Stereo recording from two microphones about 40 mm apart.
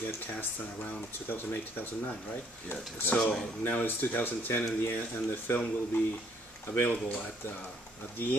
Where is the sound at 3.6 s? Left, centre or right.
Left.